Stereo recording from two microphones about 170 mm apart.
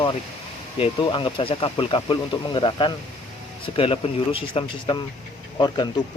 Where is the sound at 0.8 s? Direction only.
30° left (ahead or behind).